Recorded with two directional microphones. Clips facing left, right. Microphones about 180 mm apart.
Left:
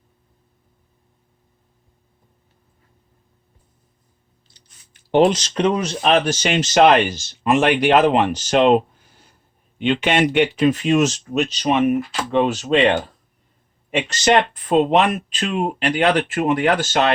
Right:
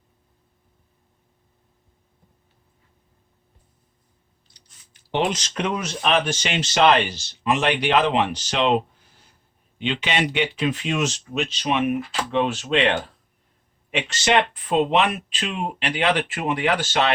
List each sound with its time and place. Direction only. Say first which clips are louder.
5.2 s speech: left 8 dB; 35° left (ahead or behind)
13.9 s speech: left 4 dB; 40° left (ahead or behind)